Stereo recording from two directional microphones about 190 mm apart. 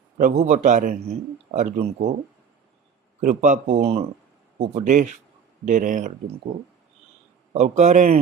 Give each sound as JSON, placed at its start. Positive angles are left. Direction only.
{"t": 0.2, "sound": "a man's voice", "side_deg": -40}
{"t": 3.2, "sound": "a man's voice", "side_deg": -45}
{"t": 7.5, "sound": "a man's voice", "side_deg": -35}